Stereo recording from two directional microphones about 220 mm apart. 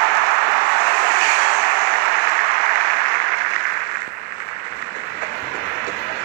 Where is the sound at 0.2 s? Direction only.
50° right (ahead or behind).